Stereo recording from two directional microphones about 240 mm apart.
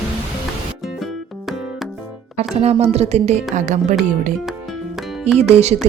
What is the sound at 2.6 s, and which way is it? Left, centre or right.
Speech, right.